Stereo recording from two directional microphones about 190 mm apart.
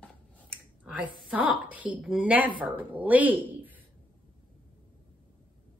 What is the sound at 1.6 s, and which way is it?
A woman's voice, 5° right (ahead or behind).